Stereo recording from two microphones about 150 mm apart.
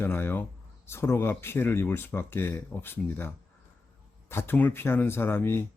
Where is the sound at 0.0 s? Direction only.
15° left (ahead or behind).